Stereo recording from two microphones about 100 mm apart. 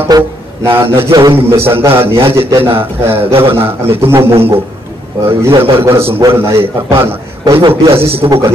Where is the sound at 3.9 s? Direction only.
25° right (ahead or behind).